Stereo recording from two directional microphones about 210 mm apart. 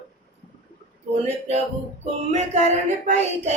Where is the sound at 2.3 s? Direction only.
35° right (ahead or behind).